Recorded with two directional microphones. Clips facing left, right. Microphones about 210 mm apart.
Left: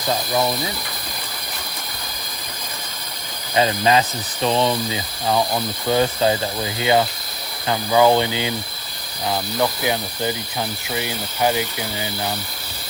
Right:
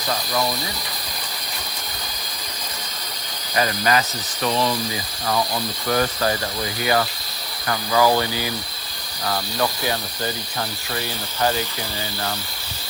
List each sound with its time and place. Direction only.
0.1 s speech: 25° left (ahead or behind)
3.5 s speech: 25° left (ahead or behind)